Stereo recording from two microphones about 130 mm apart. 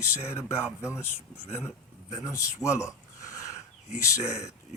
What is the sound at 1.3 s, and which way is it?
Speech, 50° left (ahead or behind).